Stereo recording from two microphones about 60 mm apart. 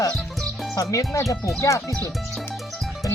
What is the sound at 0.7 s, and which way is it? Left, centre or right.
Speech, left.